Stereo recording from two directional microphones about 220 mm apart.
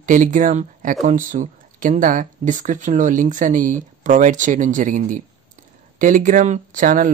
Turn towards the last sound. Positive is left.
turn(degrees=-35)  # may be behind; listen again after turning